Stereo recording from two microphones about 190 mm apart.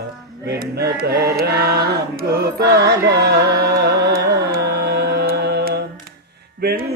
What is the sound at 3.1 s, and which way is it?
Carnatic music, 60° right (ahead or behind).